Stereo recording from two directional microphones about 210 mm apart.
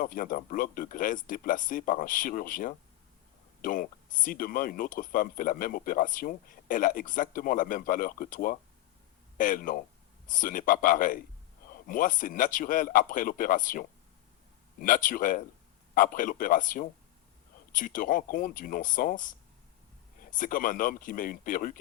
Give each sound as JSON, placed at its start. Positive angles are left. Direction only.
{"t": 0.0, "sound": "speech", "side_deg": 40}
{"t": 20.3, "sound": "speech", "side_deg": 40}